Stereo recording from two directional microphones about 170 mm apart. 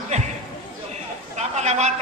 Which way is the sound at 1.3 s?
40° right (ahead or behind).